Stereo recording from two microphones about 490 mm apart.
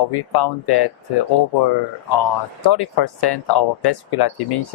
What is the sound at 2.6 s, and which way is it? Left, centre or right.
Speech, left.